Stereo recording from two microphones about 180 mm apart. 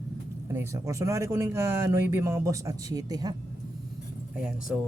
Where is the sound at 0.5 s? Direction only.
15° right (ahead or behind).